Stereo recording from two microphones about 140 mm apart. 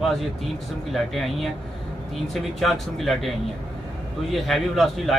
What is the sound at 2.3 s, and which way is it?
Speech, centre (ahead or behind).